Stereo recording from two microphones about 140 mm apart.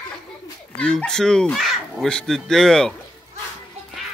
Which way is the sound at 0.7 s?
5° left (ahead or behind).